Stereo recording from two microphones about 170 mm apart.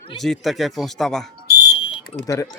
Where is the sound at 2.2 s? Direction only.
20° left (ahead or behind).